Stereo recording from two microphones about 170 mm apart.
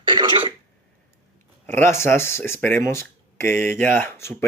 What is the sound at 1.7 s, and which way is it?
Speech, 15° left (ahead or behind).